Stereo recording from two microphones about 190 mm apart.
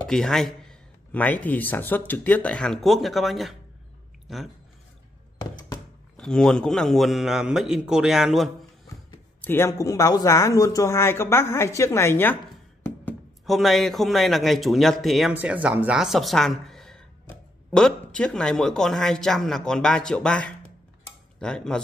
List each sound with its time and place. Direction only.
0.0 s a man's voice: 5° left (ahead or behind)
5.4 s a sound: 20° left (ahead or behind)
6.1 s a man's voice: 5° left (ahead or behind)
9.4 s speech: 10° left (ahead or behind)
13.5 s a man's voice: centre (ahead or behind)